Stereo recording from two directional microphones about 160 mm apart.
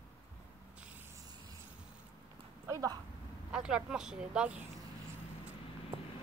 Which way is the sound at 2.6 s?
20° right (ahead or behind).